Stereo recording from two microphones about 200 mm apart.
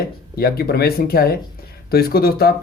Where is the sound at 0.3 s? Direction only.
50° left (ahead or behind).